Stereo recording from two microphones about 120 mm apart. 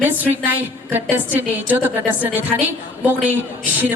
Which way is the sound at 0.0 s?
15° right (ahead or behind).